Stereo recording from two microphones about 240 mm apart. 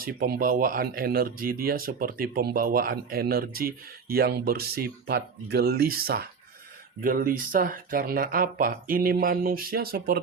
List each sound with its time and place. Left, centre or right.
0.0 s speech: right